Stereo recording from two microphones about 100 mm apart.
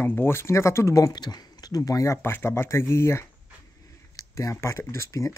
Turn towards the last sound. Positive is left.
turn(degrees=30)  # may be behind; listen again after turning